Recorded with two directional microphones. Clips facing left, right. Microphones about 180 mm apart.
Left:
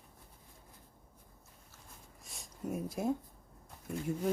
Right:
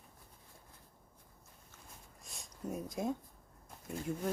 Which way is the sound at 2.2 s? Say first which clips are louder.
Left 2 dB; centre (ahead or behind).